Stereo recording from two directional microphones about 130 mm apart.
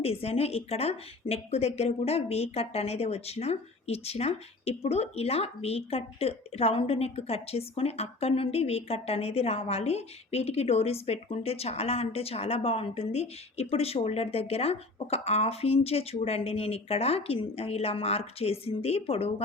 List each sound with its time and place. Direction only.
0.0 s a woman's voice: 50° left (ahead or behind)